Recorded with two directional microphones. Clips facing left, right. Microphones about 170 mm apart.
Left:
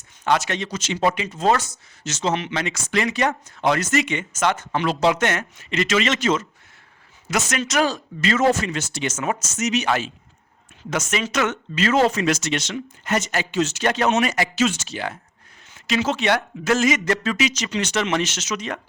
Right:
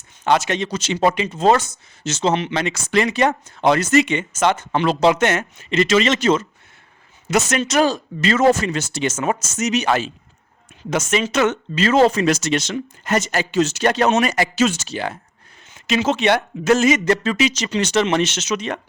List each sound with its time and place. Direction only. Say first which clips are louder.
0.3 s speech: right 3 dB; 20° right (ahead or behind)
0.7 s speech: right 2 dB; 30° right (ahead or behind)
10.8 s speech: right 4 dB; 25° right (ahead or behind)